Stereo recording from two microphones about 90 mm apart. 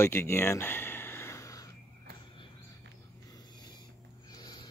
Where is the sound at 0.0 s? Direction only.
30° left (ahead or behind).